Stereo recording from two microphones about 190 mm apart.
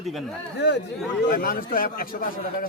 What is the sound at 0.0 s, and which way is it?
Speech, centre (ahead or behind).